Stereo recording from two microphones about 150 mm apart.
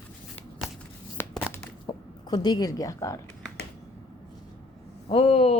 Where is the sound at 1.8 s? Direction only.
25° left (ahead or behind).